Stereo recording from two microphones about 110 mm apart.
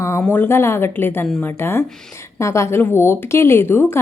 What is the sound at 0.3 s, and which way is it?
A woman's voice, 20° left (ahead or behind).